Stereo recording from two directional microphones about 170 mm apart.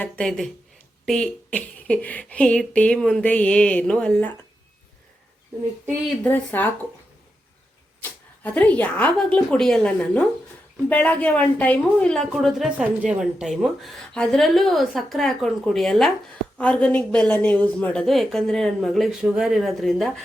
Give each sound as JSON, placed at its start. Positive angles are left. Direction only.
{"t": 0.0, "sound": "a woman's voice", "side_deg": 5}
{"t": 6.2, "sound": "speech", "side_deg": 10}
{"t": 8.4, "sound": "a woman's voice", "side_deg": 10}